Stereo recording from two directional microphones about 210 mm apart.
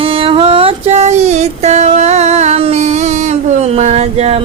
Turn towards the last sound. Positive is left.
turn(degrees=-30)  # may be behind; listen again after turning